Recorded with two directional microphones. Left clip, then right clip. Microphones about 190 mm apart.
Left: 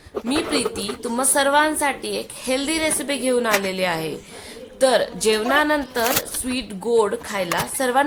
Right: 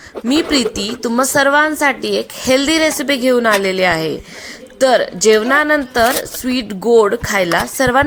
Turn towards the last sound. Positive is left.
turn(degrees=-30)  # may be behind; listen again after turning